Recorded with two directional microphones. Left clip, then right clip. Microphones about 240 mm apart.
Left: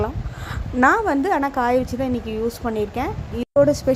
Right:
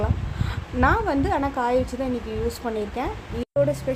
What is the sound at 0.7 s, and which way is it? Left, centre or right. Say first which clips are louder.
A woman's voice: left 4 dB; left.